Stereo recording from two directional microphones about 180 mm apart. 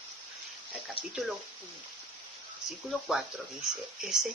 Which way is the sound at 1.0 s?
30° left (ahead or behind).